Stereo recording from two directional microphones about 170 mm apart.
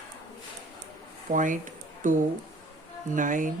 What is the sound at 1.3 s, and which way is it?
Speech, 50° right (ahead or behind).